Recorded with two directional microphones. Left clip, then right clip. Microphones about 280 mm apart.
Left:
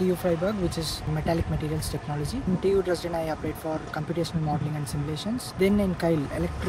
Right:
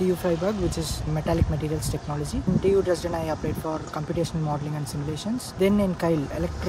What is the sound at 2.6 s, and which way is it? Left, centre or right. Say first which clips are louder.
Speech: right 2 dB; centre.